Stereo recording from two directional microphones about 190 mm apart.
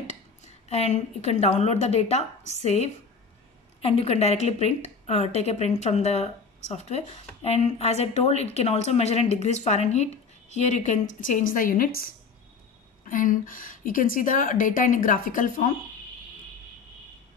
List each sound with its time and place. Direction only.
0.7 s a woman's voice: 35° left (ahead or behind)